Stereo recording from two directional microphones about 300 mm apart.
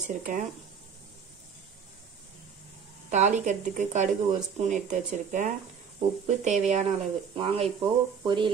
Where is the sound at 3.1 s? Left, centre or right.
Right.